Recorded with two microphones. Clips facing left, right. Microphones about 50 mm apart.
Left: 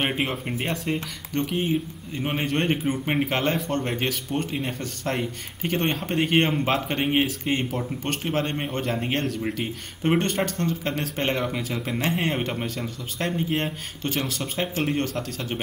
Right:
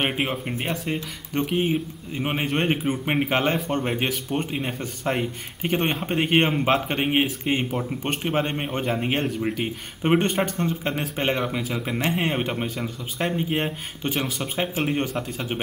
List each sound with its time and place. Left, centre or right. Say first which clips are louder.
0.0 s speech: right 1 dB; centre
1.3 s speech: right 2 dB; centre